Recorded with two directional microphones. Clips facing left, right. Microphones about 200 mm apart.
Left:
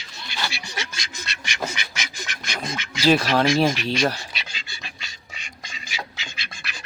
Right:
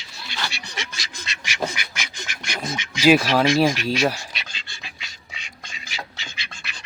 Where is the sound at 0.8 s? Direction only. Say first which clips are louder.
Even; centre (ahead or behind).